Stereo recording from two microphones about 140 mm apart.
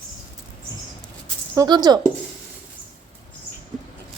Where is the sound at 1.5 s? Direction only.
30° right (ahead or behind).